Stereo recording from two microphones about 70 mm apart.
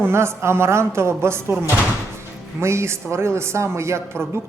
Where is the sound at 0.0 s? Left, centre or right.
Right.